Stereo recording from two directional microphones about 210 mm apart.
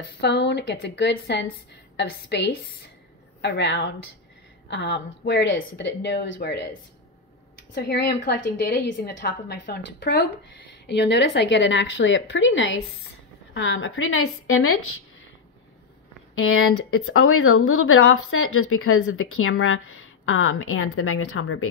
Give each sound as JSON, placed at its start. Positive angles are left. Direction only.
{"t": 0.2, "sound": "a woman's voice", "side_deg": 55}
{"t": 7.7, "sound": "a woman's voice", "side_deg": 55}
{"t": 16.3, "sound": "a woman's voice", "side_deg": 80}